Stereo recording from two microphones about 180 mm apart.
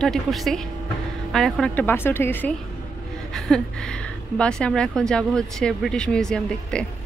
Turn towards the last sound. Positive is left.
turn(degrees=5)  # may be behind; listen again after turning